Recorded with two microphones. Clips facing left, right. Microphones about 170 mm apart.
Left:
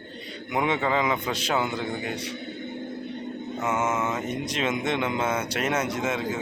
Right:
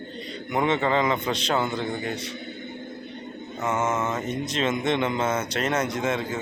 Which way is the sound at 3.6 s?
10° left (ahead or behind).